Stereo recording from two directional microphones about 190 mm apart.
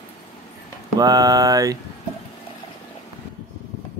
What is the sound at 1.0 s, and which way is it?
Speech, 20° right (ahead or behind).